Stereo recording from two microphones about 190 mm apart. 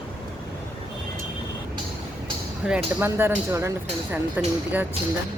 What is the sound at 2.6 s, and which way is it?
Speech, 5° right (ahead or behind).